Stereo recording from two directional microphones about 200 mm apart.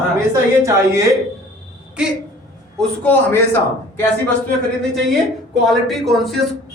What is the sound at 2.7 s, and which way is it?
Speech, 10° left (ahead or behind).